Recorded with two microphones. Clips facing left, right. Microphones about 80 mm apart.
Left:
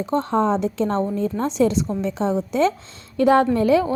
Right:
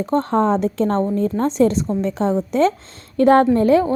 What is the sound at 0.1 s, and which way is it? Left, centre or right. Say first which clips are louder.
A woman's voice: right 2 dB; right.